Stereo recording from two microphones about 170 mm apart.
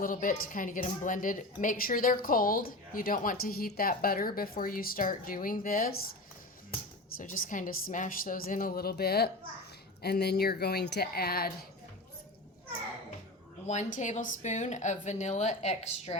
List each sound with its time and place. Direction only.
0.0 s a woman's voice: 50° left (ahead or behind)
7.2 s a woman's voice: 50° left (ahead or behind)
13.7 s speech: 45° left (ahead or behind)